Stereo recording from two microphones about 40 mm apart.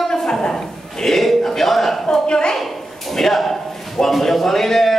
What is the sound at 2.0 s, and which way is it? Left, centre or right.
Speech, centre.